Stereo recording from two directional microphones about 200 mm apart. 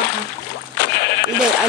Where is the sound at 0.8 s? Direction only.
60° left (ahead or behind).